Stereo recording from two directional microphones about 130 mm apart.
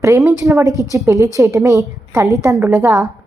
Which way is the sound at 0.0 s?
25° right (ahead or behind).